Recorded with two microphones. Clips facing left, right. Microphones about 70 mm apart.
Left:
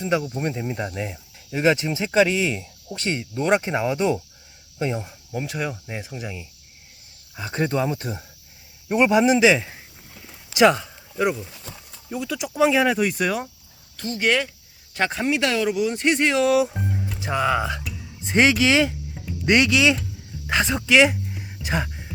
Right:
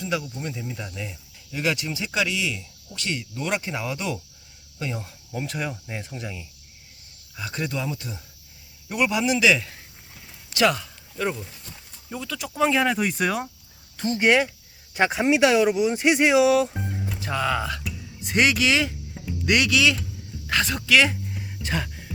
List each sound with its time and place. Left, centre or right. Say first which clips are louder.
0.0 s speech: left 5 dB; left
0.3 s speech: left 6 dB; left
1.5 s speech: left 6 dB; left
5.3 s speech: left 2 dB; centre
7.3 s speech: left 6 dB; left
10.5 s a sound: left 5 dB; left
12.1 s speech: left 5 dB; centre
13.9 s speech: right 2 dB; right
16.5 s speech: left 1 dB; centre
17.2 s speech: left 3 dB; centre